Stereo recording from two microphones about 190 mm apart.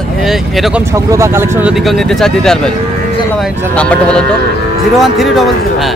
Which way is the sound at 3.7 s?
5° left (ahead or behind).